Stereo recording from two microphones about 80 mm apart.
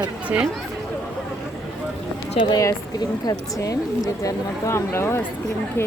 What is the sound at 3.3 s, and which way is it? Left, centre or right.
Speech, left.